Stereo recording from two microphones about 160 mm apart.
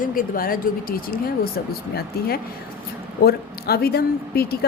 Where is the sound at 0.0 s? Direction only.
60° left (ahead or behind).